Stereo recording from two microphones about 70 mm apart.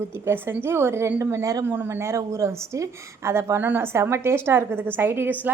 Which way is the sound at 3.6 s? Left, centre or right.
Right.